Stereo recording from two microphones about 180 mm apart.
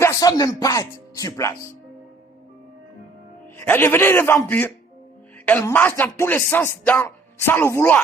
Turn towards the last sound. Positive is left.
turn(degrees=15)  # may be behind; listen again after turning